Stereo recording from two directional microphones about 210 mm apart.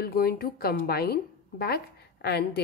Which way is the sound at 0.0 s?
45° left (ahead or behind).